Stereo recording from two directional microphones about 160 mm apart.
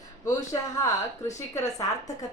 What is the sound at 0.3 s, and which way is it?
Speech, 20° left (ahead or behind).